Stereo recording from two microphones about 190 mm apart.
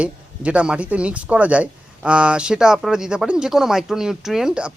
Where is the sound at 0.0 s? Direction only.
5° right (ahead or behind).